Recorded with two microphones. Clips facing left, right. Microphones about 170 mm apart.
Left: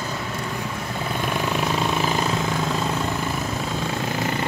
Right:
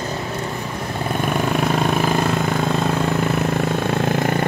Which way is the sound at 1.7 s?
55° right (ahead or behind).